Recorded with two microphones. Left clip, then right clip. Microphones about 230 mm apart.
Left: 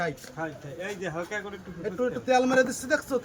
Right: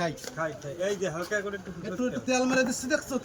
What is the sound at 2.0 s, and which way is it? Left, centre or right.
Speech, left.